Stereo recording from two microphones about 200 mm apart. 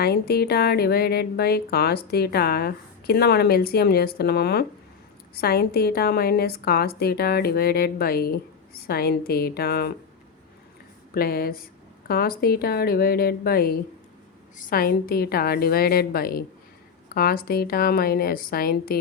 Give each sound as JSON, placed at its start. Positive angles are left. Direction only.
{"t": 0.0, "sound": "speech", "side_deg": 50}
{"t": 11.1, "sound": "speech", "side_deg": 50}